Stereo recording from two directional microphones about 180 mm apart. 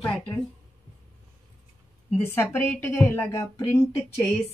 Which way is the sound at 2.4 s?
5° left (ahead or behind).